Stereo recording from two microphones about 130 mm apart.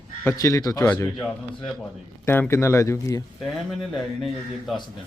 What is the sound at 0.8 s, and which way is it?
Speech, 10° left (ahead or behind).